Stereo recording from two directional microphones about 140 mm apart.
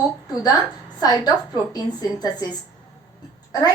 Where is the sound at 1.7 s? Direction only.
30° left (ahead or behind).